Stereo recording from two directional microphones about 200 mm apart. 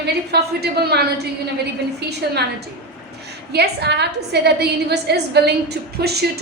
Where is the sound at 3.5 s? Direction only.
55° right (ahead or behind).